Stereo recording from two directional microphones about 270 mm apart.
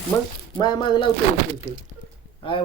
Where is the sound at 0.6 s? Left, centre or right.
Centre.